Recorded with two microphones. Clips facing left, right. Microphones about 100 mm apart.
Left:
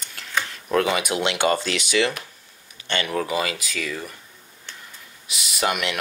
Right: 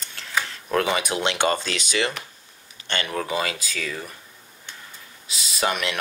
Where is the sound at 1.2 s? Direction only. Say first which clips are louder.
Left 2 dB; 30° right (ahead or behind).